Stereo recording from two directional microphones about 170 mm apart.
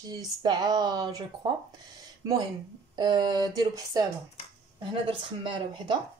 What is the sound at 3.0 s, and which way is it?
Speech, 25° right (ahead or behind).